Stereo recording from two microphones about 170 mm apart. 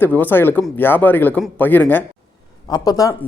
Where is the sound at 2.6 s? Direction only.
20° left (ahead or behind).